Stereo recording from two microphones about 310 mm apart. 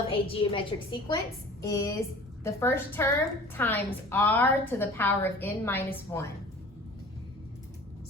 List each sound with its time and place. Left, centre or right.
0.1 s a woman's voice: centre